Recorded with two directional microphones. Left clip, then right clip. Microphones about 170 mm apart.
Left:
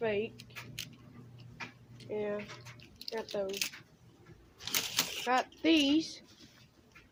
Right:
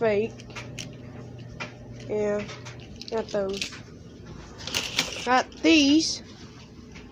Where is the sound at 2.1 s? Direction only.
15° right (ahead or behind).